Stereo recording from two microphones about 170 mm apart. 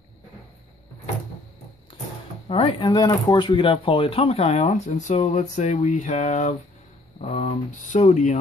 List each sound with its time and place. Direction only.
2.4 s speech: 35° left (ahead or behind)